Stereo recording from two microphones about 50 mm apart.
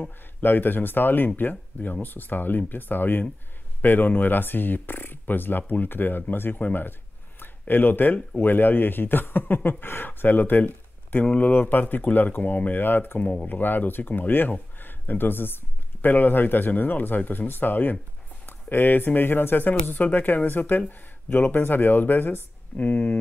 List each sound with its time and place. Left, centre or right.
0.4 s speech: left
6.6 s a sound: left
8.4 s speech: left
11.2 s speech: left
11.5 s speech: left
22.8 s speech: left